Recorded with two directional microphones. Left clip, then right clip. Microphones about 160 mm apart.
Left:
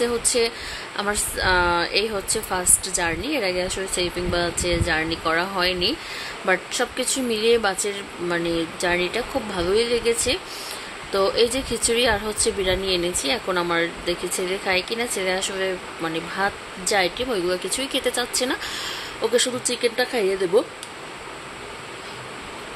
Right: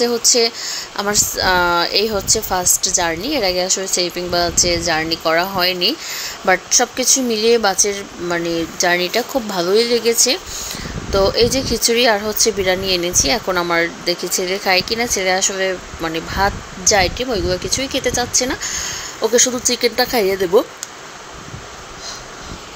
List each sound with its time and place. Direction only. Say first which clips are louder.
0.0 s speech: right 6 dB; 15° right (ahead or behind)